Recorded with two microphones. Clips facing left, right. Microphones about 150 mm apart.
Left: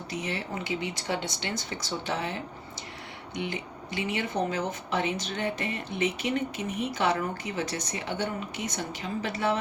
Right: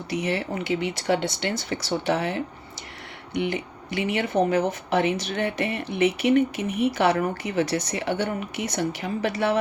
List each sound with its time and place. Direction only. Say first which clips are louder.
0.1 s speech: right 7 dB; 70° right (ahead or behind)
3.3 s speech: right 7 dB; 70° right (ahead or behind)